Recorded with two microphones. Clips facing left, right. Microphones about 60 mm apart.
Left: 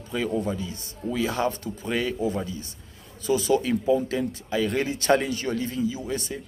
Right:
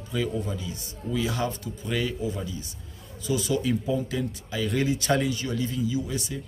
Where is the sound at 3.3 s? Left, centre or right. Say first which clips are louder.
Left 3 dB; left.